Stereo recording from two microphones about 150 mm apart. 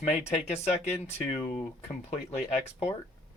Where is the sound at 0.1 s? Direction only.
45° left (ahead or behind).